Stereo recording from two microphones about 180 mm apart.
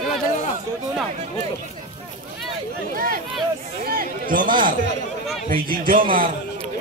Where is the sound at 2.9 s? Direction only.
50° right (ahead or behind).